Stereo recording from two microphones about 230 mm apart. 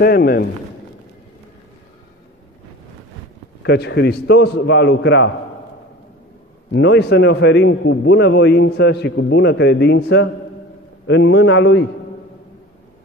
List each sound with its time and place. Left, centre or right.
0.0 s a man's voice: left
3.6 s a man's voice: left
6.7 s a man's voice: left